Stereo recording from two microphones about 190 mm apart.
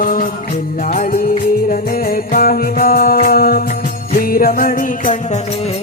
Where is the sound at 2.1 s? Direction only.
50° left (ahead or behind).